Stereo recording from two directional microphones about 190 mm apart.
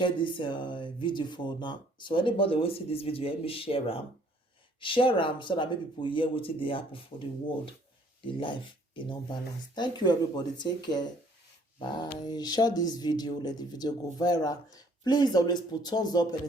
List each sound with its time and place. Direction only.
0.0 s speech: 25° left (ahead or behind)
9.0 s speech: 25° left (ahead or behind)